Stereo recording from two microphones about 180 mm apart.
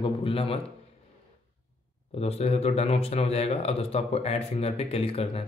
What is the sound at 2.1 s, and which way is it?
Speech, 35° left (ahead or behind).